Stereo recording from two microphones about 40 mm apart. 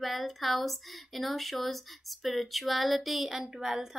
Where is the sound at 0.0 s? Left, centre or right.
Centre.